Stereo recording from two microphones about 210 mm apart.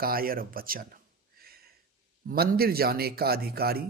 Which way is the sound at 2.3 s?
45° right (ahead or behind).